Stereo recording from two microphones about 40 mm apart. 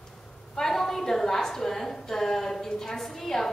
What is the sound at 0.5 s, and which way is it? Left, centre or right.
A woman's voice, centre.